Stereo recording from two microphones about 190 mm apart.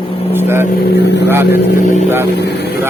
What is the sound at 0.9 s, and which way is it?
Speech, 65° left (ahead or behind).